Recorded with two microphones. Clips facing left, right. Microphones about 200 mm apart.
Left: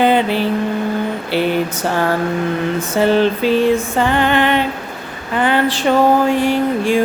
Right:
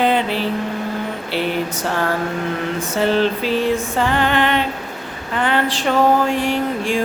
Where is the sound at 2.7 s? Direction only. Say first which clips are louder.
Left 3 dB; centre (ahead or behind).